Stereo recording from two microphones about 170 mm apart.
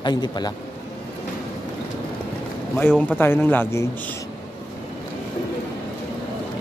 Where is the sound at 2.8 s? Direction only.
10° left (ahead or behind).